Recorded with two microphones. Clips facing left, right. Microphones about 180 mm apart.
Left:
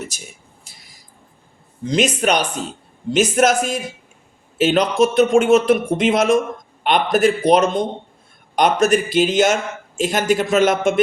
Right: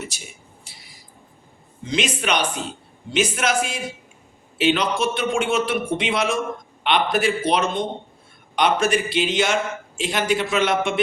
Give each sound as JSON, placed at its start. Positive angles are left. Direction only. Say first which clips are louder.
{"t": 1.8, "sound": "speech", "louder": "left 6 dB", "side_deg": 40}